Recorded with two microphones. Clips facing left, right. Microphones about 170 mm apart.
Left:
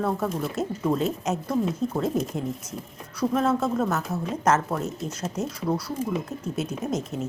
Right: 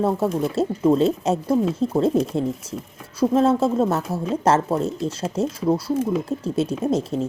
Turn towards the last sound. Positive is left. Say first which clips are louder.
# right 7 dB
turn(degrees=-30)  # may be behind; listen again after turning